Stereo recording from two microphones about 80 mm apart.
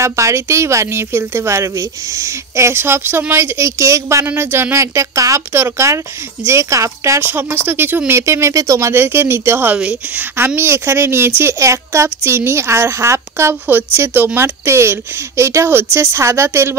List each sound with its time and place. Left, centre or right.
0.0 s a woman's voice: right
7.2 s a woman's voice: right
8.9 s speech: right
9.8 s a woman's voice: centre
10.3 s a woman's voice: right